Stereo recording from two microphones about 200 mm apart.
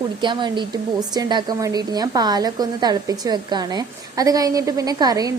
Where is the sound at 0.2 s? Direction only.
25° right (ahead or behind).